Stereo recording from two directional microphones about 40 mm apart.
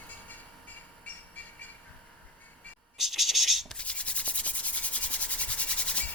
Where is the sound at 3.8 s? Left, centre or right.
Left.